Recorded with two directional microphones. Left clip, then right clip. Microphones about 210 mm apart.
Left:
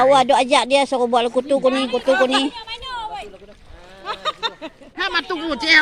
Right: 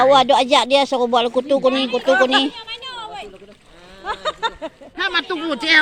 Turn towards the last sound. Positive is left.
turn(degrees=-5)  # may be behind; listen again after turning